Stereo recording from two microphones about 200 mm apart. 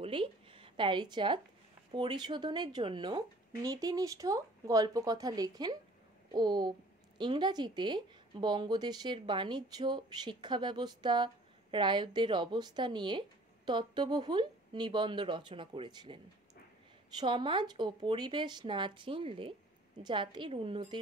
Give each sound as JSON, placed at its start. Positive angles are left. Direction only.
{"t": 0.0, "sound": "a sound", "side_deg": -25}
{"t": 1.9, "sound": "speech", "side_deg": -25}
{"t": 17.2, "sound": "speech", "side_deg": -25}